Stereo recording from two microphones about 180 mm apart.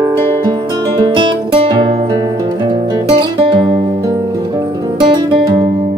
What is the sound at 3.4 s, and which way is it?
Music, 25° right (ahead or behind).